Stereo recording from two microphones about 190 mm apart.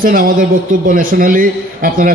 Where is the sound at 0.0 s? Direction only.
45° right (ahead or behind).